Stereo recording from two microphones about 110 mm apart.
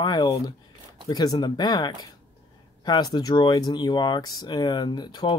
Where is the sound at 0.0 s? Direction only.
40° left (ahead or behind).